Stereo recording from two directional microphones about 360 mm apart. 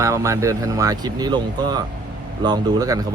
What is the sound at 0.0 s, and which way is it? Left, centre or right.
Speech, centre.